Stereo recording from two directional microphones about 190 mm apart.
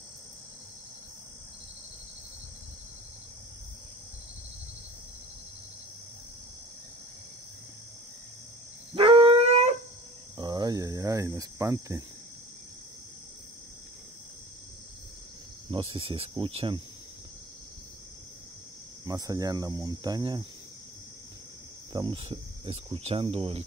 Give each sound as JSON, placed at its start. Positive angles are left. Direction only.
{"t": 8.9, "sound": "dog", "side_deg": -30}
{"t": 10.3, "sound": "cricket", "side_deg": -20}
{"t": 15.7, "sound": "speech", "side_deg": -30}
{"t": 19.0, "sound": "speech", "side_deg": -20}
{"t": 21.9, "sound": "speech", "side_deg": -25}